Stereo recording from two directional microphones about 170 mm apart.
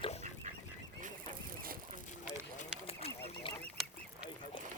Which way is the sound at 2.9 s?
35° left (ahead or behind).